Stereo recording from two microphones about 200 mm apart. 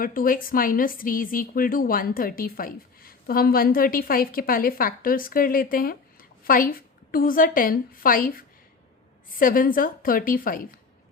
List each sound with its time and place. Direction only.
0.0 s a woman's voice: 45° left (ahead or behind)